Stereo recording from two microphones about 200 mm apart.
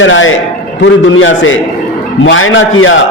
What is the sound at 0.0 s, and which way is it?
A man's voice, 75° left (ahead or behind).